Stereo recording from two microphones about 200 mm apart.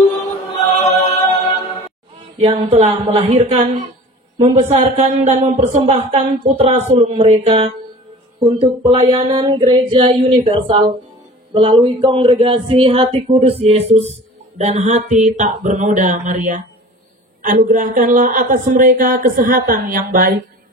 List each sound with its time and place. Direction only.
0.7 s music: 35° left (ahead or behind)
2.3 s speech: 35° right (ahead or behind)